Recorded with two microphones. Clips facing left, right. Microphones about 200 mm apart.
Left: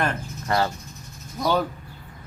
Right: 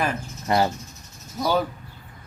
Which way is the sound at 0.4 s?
20° right (ahead or behind).